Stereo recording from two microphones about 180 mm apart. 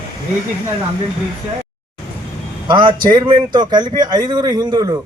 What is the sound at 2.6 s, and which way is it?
Speech, 25° right (ahead or behind).